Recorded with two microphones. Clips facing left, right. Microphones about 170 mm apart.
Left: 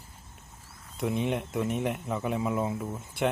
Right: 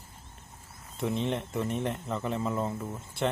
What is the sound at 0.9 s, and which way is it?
Speech, 5° left (ahead or behind).